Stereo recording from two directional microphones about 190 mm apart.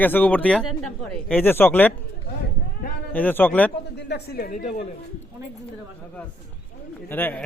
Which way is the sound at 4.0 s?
60° left (ahead or behind).